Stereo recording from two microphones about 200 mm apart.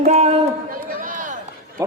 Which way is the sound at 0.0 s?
35° right (ahead or behind).